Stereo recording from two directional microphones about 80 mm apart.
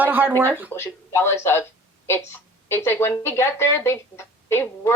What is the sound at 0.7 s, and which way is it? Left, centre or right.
Speech, left.